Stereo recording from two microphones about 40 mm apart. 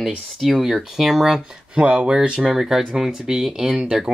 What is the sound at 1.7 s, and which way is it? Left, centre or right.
Speech, right.